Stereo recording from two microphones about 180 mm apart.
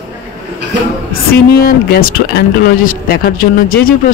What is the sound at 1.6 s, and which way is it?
Speech, 55° left (ahead or behind).